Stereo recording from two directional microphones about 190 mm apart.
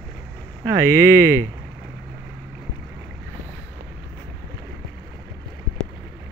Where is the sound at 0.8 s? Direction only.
15° right (ahead or behind).